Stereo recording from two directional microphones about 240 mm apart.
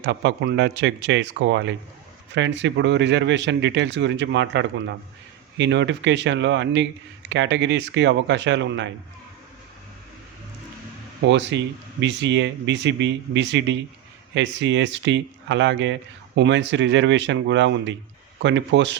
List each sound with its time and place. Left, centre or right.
0.0 s speech: right
11.3 s speech: right